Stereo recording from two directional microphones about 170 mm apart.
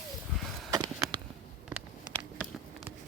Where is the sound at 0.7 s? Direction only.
20° right (ahead or behind).